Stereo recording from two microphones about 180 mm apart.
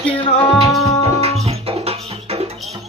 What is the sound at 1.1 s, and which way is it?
Music, 35° right (ahead or behind).